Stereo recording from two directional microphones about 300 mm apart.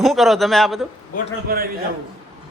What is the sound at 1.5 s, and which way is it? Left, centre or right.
Speech, right.